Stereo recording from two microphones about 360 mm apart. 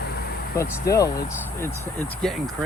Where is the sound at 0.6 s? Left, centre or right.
Centre.